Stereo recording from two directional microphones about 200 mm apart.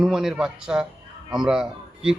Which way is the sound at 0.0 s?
5° right (ahead or behind).